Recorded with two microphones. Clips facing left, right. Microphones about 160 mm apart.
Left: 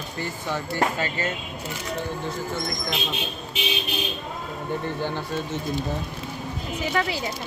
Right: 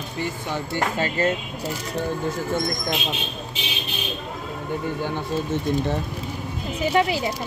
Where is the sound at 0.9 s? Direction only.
35° right (ahead or behind).